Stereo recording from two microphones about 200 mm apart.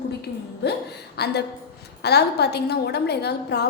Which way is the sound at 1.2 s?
55° left (ahead or behind).